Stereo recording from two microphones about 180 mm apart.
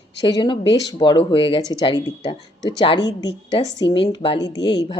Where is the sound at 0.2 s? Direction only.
25° left (ahead or behind).